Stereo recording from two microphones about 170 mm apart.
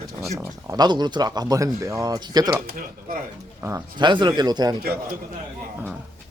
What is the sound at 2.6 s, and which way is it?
Speech, 60° right (ahead or behind).